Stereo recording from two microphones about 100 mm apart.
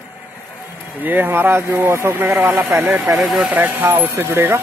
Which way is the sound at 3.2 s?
5° right (ahead or behind).